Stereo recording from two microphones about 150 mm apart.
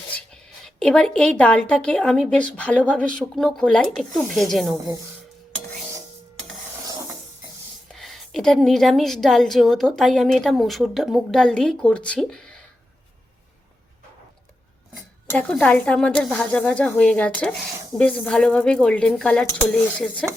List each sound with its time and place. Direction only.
0.1 s a woman's voice: 5° left (ahead or behind)
7.9 s a woman's voice: centre (ahead or behind)
15.3 s speech: 5° left (ahead or behind)